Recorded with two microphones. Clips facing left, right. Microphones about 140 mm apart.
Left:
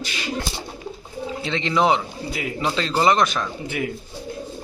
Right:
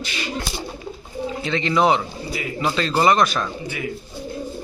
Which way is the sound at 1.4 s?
25° left (ahead or behind).